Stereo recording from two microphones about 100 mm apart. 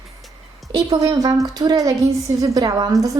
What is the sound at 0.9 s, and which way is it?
A woman's voice, 40° right (ahead or behind).